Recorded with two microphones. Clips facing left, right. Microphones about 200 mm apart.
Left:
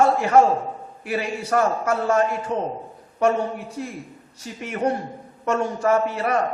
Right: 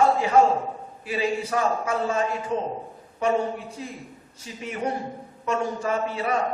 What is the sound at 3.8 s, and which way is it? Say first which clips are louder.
A man's voice: left 5 dB; 65° left (ahead or behind).